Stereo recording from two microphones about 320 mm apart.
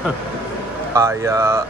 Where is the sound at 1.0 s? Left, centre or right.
Centre.